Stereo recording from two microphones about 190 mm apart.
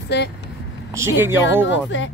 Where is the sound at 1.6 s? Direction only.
75° left (ahead or behind).